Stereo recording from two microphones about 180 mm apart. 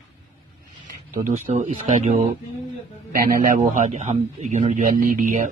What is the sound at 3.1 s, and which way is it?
A man's voice, 50° right (ahead or behind).